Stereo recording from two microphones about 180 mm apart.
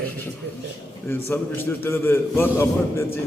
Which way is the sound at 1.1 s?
15° left (ahead or behind).